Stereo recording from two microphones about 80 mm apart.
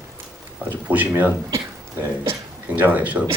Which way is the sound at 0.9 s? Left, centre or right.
Right.